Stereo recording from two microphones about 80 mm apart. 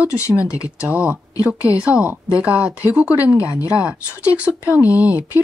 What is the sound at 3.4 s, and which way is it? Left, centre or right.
Speech, left.